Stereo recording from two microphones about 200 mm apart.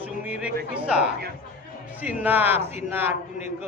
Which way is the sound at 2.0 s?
10° right (ahead or behind).